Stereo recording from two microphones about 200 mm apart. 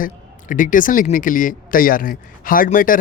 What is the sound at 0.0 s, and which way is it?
Speech, 40° left (ahead or behind).